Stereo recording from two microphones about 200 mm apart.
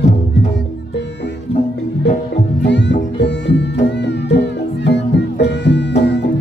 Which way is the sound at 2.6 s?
60° left (ahead or behind).